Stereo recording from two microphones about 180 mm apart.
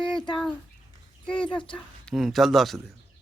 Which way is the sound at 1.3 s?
25° left (ahead or behind).